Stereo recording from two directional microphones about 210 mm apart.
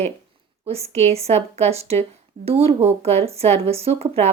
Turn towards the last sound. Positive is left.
turn(degrees=-30)  # may be behind; listen again after turning